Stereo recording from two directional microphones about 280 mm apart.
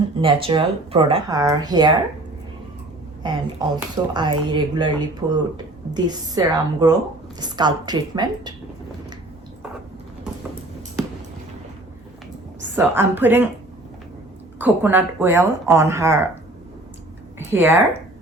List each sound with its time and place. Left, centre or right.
0.2 s speech: centre
3.2 s speech: centre
12.7 s speech: centre
14.6 s speech: centre